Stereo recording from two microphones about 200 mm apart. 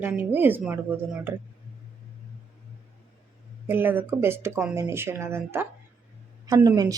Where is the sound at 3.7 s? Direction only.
10° right (ahead or behind).